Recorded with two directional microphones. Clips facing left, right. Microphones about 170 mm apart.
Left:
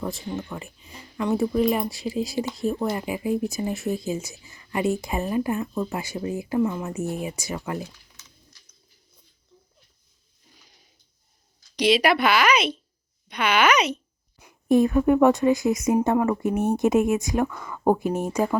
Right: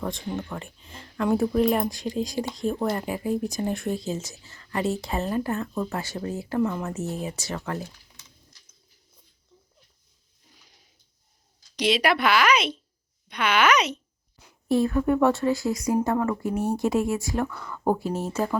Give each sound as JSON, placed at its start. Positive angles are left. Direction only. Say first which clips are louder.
{"t": 0.0, "sound": "a woman's voice", "louder": "even", "side_deg": 5}
{"t": 11.8, "sound": "speech", "louder": "left 3 dB", "side_deg": 0}
{"t": 14.4, "sound": "a woman's voice", "louder": "left 4 dB", "side_deg": 15}